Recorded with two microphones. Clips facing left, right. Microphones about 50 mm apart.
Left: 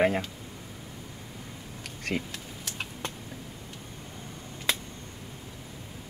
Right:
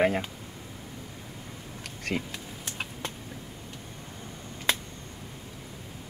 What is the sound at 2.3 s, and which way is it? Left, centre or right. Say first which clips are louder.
Computer keyboard: right 1 dB; centre.